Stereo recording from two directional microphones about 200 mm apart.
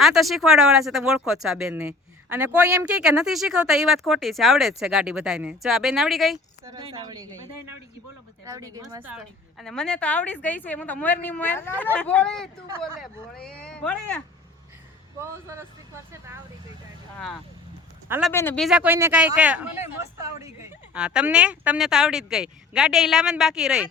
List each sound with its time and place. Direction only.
0.0 s speech: centre (ahead or behind)
6.7 s speech: 25° right (ahead or behind)
9.1 s a woman's voice: centre (ahead or behind)
15.2 s speech: 15° right (ahead or behind)
18.3 s speech: 10° left (ahead or behind)